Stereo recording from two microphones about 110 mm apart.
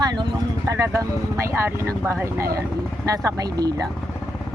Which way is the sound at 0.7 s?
25° right (ahead or behind).